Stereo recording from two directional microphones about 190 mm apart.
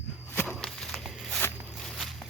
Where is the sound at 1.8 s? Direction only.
Centre (ahead or behind).